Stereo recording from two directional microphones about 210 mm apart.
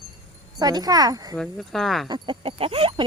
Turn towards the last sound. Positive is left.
turn(degrees=-25)  # may be behind; listen again after turning